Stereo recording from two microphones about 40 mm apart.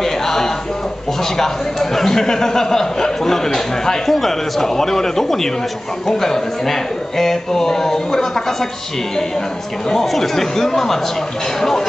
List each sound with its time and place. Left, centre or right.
0.0 s a sound: centre
1.2 s speech: centre
9.8 s speech: centre